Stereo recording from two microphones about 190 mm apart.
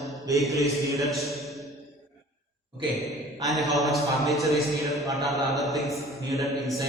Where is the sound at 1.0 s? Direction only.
Centre (ahead or behind).